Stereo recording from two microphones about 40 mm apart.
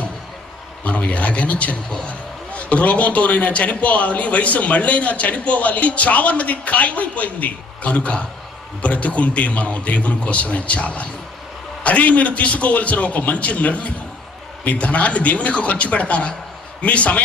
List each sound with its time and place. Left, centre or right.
0.8 s a man's voice: left